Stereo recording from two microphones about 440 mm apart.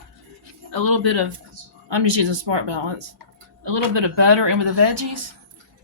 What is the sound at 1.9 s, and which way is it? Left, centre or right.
Speech, right.